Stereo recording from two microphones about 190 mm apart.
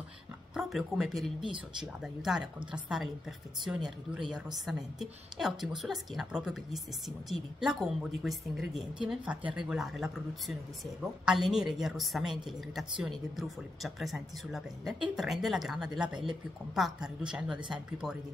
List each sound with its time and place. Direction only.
0.6 s speech: centre (ahead or behind)